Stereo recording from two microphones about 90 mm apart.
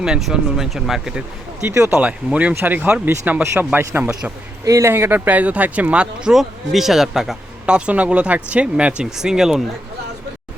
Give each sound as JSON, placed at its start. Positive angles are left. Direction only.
{"t": 0.0, "sound": "speech", "side_deg": -5}
{"t": 1.6, "sound": "speech", "side_deg": -30}
{"t": 2.0, "sound": "speech", "side_deg": -15}
{"t": 3.4, "sound": "speech", "side_deg": -30}
{"t": 4.6, "sound": "speech", "side_deg": -35}